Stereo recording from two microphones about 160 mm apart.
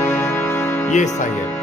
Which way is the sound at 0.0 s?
15° left (ahead or behind).